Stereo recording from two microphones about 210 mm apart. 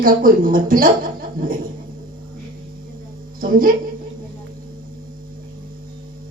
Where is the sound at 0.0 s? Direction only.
40° right (ahead or behind).